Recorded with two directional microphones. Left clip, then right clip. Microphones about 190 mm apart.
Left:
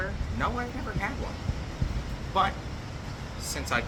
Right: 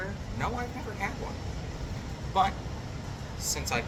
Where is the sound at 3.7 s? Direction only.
15° left (ahead or behind).